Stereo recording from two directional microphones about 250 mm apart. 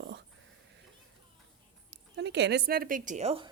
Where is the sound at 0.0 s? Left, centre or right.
Right.